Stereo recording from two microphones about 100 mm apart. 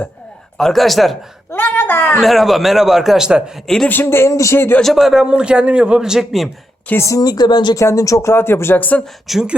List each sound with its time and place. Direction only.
0.5 s a man's voice: 5° left (ahead or behind)
1.5 s speech: 20° left (ahead or behind)
2.2 s a man's voice: centre (ahead or behind)
3.8 s speech: 20° left (ahead or behind)
4.8 s a man's voice: centre (ahead or behind)
6.8 s speech: 25° left (ahead or behind)
7.2 s speech: 45° left (ahead or behind)
7.8 s speech: 30° left (ahead or behind); by 9.0 s 15° left (ahead or behind)
9.2 s a man's voice: 5° right (ahead or behind)